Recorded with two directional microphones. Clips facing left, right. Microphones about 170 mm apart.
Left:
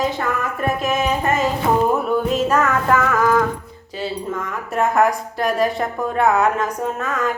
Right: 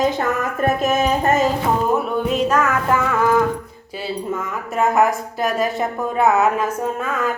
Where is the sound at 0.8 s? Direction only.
40° right (ahead or behind).